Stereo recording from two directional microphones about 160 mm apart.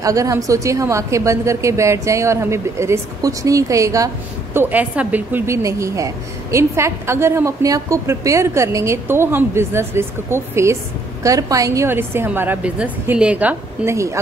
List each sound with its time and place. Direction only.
0.0 s a woman's voice: 20° right (ahead or behind)